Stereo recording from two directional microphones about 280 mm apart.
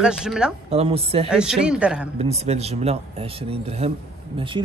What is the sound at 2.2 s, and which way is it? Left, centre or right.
Speech, right.